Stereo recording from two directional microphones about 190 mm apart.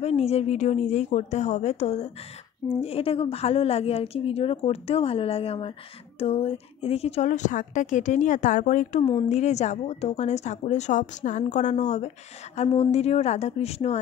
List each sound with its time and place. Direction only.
0.0 s a woman's voice: 35° left (ahead or behind)